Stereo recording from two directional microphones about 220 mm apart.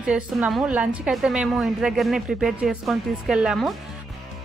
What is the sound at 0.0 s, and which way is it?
A woman's voice, 5° right (ahead or behind).